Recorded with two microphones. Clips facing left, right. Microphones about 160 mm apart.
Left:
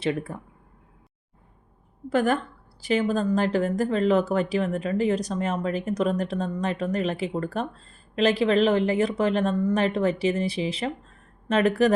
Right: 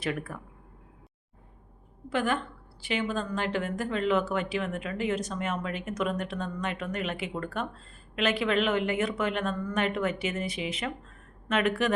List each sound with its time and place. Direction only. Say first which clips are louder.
0.0 s speech: left 6 dB; 25° left (ahead or behind)
2.0 s a woman's voice: left 6 dB; 40° left (ahead or behind)